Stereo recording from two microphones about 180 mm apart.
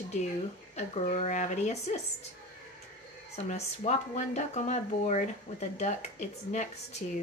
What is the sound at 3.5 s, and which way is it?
Speech, 40° left (ahead or behind).